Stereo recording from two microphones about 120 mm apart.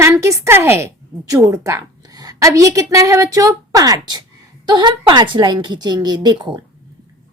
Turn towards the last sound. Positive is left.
turn(degrees=-40)  # may be behind; listen again after turning